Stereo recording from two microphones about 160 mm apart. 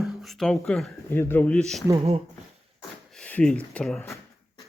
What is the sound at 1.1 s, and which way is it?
Speech, 15° left (ahead or behind).